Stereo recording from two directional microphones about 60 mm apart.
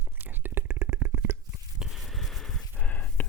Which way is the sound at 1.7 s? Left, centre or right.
Centre.